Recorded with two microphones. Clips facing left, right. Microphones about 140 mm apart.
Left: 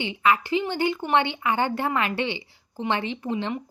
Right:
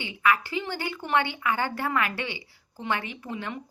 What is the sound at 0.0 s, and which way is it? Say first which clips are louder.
A woman's voice: left 3 dB; 25° left (ahead or behind).